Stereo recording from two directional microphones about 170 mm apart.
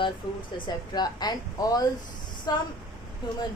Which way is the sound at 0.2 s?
30° left (ahead or behind).